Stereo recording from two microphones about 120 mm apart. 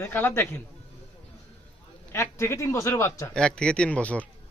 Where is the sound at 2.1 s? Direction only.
20° left (ahead or behind).